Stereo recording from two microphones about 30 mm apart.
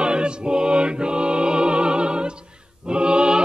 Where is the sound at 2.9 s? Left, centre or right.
Right.